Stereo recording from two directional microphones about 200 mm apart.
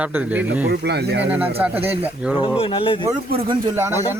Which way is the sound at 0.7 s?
55° right (ahead or behind).